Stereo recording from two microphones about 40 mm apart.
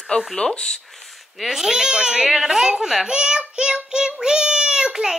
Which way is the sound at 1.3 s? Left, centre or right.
Centre.